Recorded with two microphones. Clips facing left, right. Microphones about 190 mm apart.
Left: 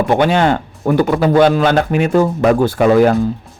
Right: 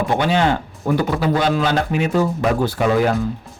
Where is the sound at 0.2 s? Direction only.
55° left (ahead or behind).